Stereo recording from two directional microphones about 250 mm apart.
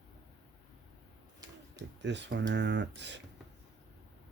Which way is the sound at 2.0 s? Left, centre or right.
Right.